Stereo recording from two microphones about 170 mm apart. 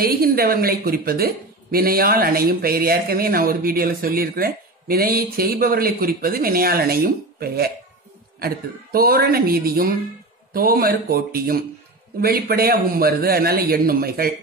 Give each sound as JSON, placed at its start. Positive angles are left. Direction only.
{"t": 0.0, "sound": "a woman's voice", "side_deg": -60}